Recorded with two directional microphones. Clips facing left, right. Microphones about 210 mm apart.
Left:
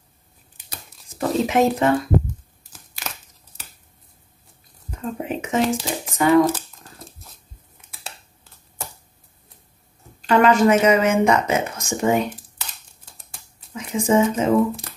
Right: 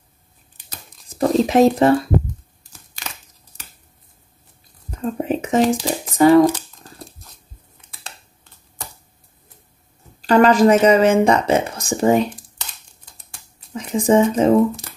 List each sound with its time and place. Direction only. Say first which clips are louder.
1.0 s speech: right 5 dB; 35° right (ahead or behind)
5.1 s shuffling cards: right 4 dB; 35° right (ahead or behind)
10.2 s speech: right 3 dB; 35° right (ahead or behind)
12.5 s a sound: even; 5° left (ahead or behind)
13.7 s speech: right 3 dB; 35° right (ahead or behind)